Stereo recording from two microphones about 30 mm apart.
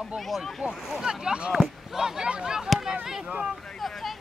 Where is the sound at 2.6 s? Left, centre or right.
Centre.